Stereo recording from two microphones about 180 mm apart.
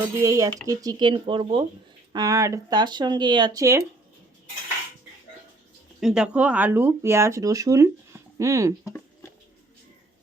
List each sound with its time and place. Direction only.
0.2 s speech: 20° right (ahead or behind)
6.0 s speech: 5° right (ahead or behind)